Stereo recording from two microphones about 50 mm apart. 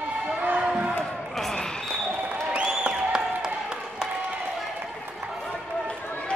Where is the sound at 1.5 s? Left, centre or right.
Centre.